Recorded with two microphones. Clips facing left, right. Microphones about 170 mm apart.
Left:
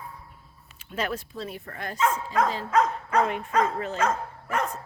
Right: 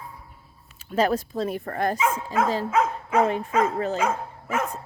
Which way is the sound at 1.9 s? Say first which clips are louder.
Left 5 dB; 5° right (ahead or behind).